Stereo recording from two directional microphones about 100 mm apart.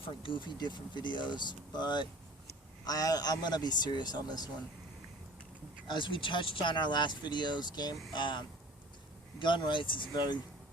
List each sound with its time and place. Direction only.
0.0 s speech: 60° left (ahead or behind); by 4.4 s 40° left (ahead or behind)
5.9 s speech: 55° left (ahead or behind)
10.1 s speech: 45° left (ahead or behind)